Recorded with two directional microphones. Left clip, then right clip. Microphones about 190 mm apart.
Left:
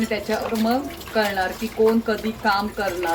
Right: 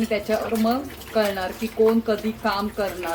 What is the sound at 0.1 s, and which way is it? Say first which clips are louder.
Speech: right 1 dB; 20° right (ahead or behind).